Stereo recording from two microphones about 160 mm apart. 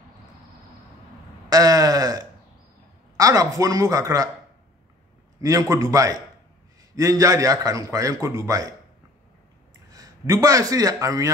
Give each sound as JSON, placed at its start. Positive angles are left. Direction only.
{"t": 1.5, "sound": "a sound", "side_deg": -20}
{"t": 3.2, "sound": "a man's voice", "side_deg": -20}
{"t": 5.4, "sound": "a man's voice", "side_deg": -20}
{"t": 9.8, "sound": "a man's voice", "side_deg": -20}